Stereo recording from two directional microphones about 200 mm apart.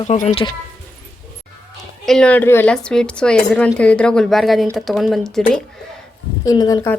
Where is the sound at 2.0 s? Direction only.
5° left (ahead or behind).